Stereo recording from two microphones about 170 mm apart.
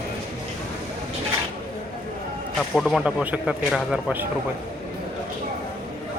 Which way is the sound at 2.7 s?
Centre (ahead or behind).